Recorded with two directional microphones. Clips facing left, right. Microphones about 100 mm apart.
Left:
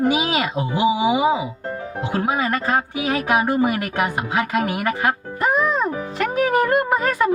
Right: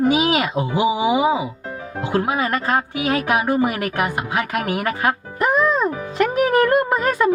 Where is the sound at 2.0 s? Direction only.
20° left (ahead or behind).